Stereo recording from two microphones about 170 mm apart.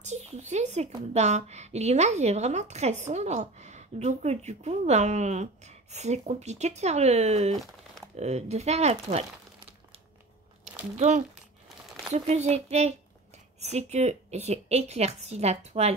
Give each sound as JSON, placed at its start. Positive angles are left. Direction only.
{"t": 0.0, "sound": "a sound", "side_deg": -45}
{"t": 1.1, "sound": "a woman's voice", "side_deg": -40}
{"t": 10.6, "sound": "a woman's voice", "side_deg": -40}